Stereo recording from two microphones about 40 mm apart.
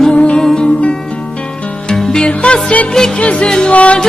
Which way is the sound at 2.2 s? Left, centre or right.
Left.